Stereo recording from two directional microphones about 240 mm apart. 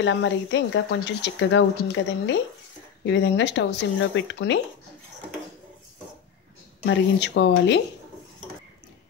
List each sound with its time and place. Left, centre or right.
0.0 s speech: left
6.9 s speech: left